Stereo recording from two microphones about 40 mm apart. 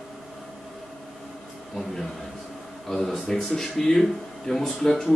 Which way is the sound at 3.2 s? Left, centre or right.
Centre.